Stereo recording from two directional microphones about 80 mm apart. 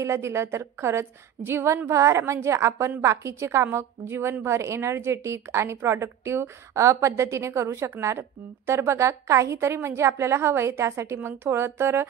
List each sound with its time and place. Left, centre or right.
0.0 s a woman's voice: right